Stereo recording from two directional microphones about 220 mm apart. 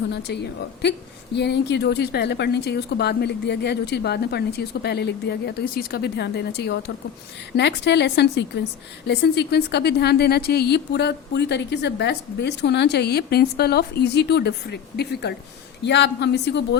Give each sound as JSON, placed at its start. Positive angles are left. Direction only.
{"t": 0.1, "sound": "a woman's voice", "side_deg": 50}